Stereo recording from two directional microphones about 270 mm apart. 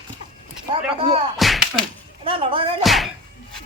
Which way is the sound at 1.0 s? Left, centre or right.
Right.